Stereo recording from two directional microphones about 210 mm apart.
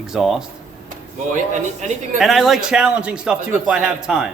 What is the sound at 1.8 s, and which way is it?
Speech, 35° right (ahead or behind).